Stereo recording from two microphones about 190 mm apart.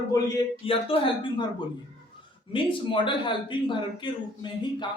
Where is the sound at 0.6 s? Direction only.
30° left (ahead or behind).